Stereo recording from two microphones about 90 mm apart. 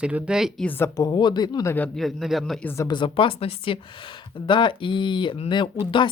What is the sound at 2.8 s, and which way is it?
Speech, 65° left (ahead or behind).